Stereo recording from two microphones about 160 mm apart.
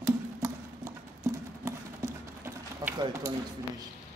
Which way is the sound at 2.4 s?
10° right (ahead or behind).